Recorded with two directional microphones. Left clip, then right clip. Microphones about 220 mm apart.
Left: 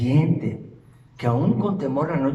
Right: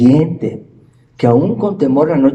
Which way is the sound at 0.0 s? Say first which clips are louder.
Right 12 dB; 45° right (ahead or behind).